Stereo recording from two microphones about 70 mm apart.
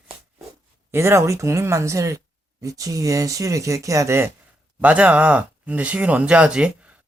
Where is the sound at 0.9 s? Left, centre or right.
Right.